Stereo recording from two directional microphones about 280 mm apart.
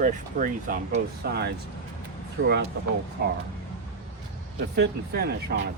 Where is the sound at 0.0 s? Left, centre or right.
Right.